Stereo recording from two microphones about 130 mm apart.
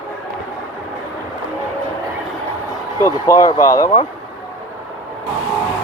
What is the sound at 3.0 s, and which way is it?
Speech, 25° left (ahead or behind).